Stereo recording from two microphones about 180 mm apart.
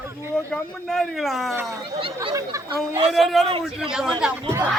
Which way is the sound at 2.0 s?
25° right (ahead or behind).